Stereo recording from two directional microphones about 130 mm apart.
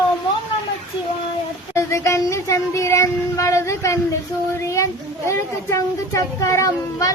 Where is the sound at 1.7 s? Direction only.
20° left (ahead or behind).